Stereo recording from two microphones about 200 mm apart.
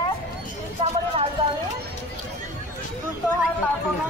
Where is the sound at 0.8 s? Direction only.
25° right (ahead or behind).